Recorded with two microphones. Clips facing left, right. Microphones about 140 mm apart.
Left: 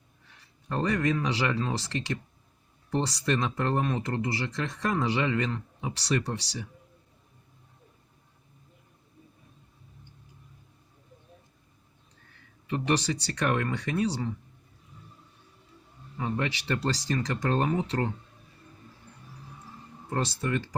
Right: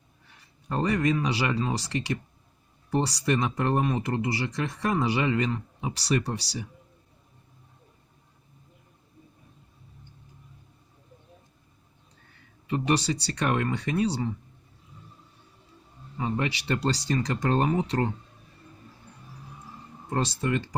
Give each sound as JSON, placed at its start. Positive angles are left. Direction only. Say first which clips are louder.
{"t": 0.7, "sound": "speech", "louder": "right 2 dB", "side_deg": -10}
{"t": 12.6, "sound": "speech", "louder": "right 2 dB", "side_deg": -10}
{"t": 16.1, "sound": "speech", "louder": "right 2 dB", "side_deg": -15}
{"t": 20.1, "sound": "speech", "louder": "right 2 dB", "side_deg": -20}